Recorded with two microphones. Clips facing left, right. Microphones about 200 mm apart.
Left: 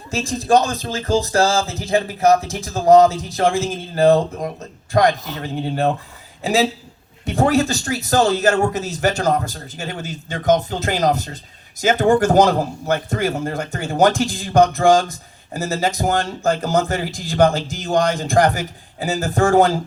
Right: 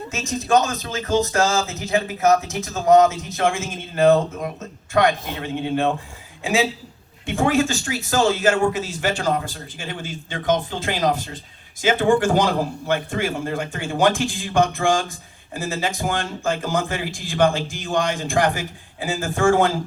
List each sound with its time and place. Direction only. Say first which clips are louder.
0.1 s speech: left 3 dB; 35° left (ahead or behind)